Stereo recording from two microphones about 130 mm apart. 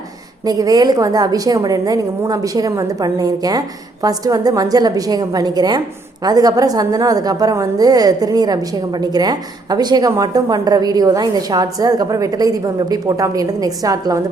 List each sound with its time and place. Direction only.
0.4 s a woman's voice: 30° right (ahead or behind)